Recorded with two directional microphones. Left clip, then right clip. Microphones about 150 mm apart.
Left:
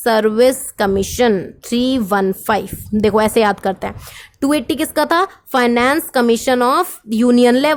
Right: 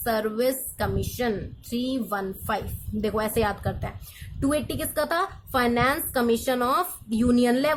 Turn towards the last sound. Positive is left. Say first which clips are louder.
# left 10 dB
turn(degrees=65)  # may be behind; listen again after turning